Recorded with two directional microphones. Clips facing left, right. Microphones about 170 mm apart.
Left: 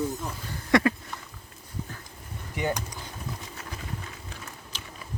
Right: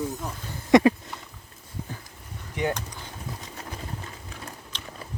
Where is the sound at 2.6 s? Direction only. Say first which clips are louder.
Right 1 dB; 10° left (ahead or behind).